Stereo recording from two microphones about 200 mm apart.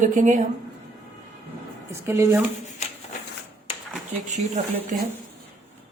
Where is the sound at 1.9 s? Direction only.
15° right (ahead or behind).